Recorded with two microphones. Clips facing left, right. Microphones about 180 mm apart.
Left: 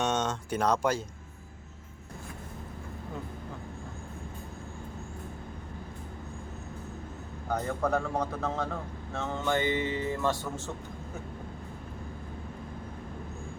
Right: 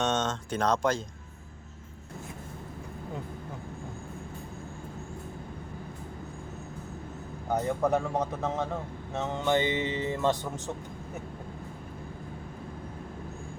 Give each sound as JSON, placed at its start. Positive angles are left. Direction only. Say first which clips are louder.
{"t": 0.0, "sound": "speech", "louder": "right 1 dB", "side_deg": 10}
{"t": 7.4, "sound": "music", "louder": "right 3 dB", "side_deg": -20}